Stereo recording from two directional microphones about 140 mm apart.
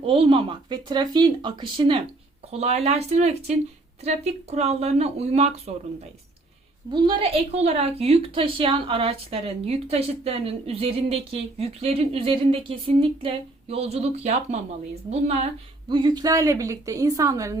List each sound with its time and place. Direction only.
0.0 s speech: 40° right (ahead or behind)
2.5 s a woman's voice: 50° right (ahead or behind)
6.9 s a woman's voice: 35° right (ahead or behind)
15.9 s a woman's voice: 35° right (ahead or behind)